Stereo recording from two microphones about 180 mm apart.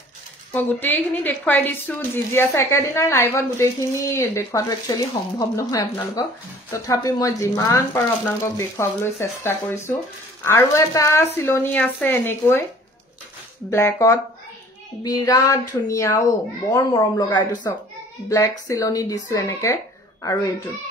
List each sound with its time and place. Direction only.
0.5 s a woman's voice: 10° left (ahead or behind)
13.7 s a woman's voice: 15° left (ahead or behind)